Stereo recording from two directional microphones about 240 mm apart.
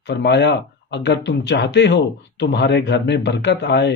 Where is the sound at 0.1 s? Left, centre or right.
Left.